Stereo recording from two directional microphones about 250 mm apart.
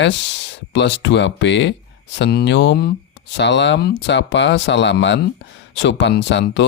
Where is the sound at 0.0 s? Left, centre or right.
Left.